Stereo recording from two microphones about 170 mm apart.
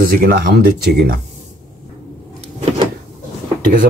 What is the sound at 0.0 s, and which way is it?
Speech, 60° right (ahead or behind).